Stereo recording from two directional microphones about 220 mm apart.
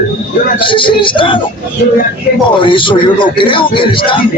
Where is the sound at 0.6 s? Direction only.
20° left (ahead or behind).